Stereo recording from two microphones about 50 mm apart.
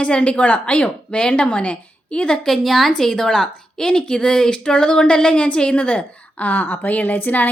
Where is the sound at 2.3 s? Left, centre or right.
Centre; by 7.4 s left.